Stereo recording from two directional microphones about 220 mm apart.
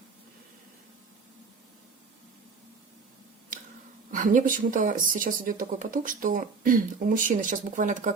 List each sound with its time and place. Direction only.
4.1 s speech: 35° right (ahead or behind)